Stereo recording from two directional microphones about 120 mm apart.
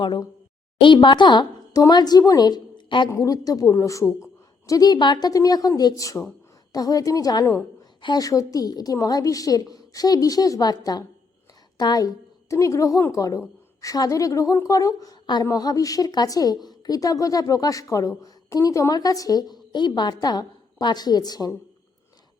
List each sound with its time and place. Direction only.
0.0 s speech: 40° left (ahead or behind)
3.1 s a woman's voice: 30° left (ahead or behind)